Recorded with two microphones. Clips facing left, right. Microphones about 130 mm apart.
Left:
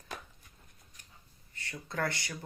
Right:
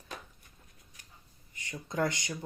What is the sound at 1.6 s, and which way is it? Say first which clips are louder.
Speech: right 3 dB; 15° right (ahead or behind).